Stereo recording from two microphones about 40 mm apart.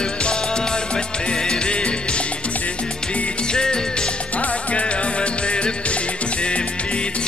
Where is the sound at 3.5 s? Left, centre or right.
Left.